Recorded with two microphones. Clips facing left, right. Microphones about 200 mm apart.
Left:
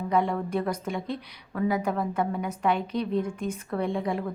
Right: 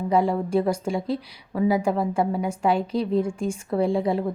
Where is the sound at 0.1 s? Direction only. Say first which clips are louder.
Right 5 dB; 30° right (ahead or behind).